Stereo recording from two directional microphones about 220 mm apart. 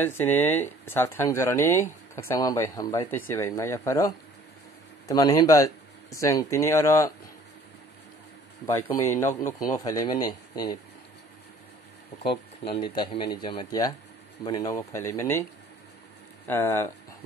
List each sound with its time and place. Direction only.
0.0 s speech: 10° left (ahead or behind)
9.0 s speech: 10° left (ahead or behind)
12.2 s speech: 25° left (ahead or behind)
16.4 s speech: 10° left (ahead or behind)